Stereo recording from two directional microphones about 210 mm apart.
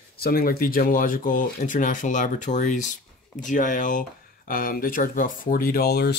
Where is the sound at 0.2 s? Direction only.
45° left (ahead or behind).